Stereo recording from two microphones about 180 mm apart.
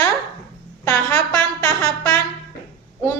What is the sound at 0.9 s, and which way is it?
A woman's voice, 5° left (ahead or behind).